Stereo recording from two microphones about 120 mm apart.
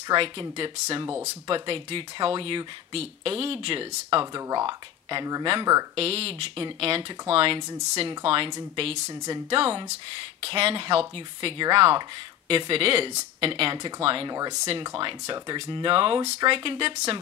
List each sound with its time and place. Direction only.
0.1 s speech: 45° right (ahead or behind)
5.9 s speech: 55° right (ahead or behind)
7.8 s speech: 65° right (ahead or behind)
8.1 s speech: 50° right (ahead or behind)
8.5 s speech: 35° right (ahead or behind)
8.8 s speech: 70° right (ahead or behind)
9.5 s speech: 45° right (ahead or behind)
14.3 s speech: 35° right (ahead or behind)
16.9 s speech: 60° right (ahead or behind)